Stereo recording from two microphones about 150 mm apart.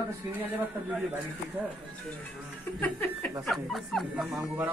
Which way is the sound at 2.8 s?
10° left (ahead or behind).